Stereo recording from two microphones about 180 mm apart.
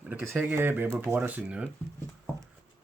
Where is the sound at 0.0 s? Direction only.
10° right (ahead or behind).